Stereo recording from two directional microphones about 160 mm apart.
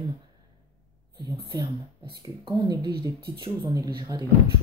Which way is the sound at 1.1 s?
30° right (ahead or behind).